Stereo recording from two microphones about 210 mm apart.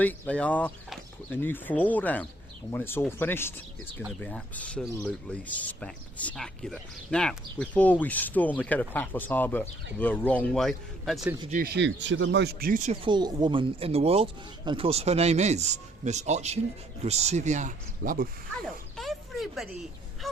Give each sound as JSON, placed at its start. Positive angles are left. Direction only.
{"t": 0.0, "sound": "speech", "side_deg": 5}
{"t": 11.5, "sound": "speech", "side_deg": -45}
{"t": 13.1, "sound": "speech", "side_deg": -20}
{"t": 18.5, "sound": "a sound", "side_deg": 0}